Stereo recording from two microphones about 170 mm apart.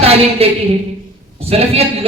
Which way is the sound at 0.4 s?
35° right (ahead or behind).